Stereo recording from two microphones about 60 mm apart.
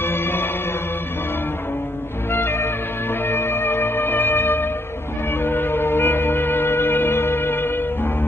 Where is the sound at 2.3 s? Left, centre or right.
Left.